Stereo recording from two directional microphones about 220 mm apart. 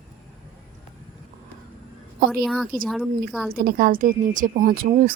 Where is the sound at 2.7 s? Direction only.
40° right (ahead or behind).